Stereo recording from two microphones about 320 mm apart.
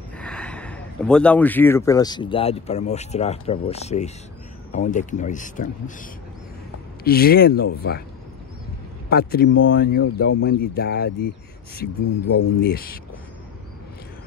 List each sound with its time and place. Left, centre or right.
0.2 s speech: centre; by 6.0 s left
7.1 s speech: left
9.1 s speech: left